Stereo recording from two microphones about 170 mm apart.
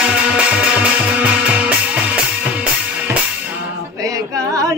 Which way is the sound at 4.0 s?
20° right (ahead or behind).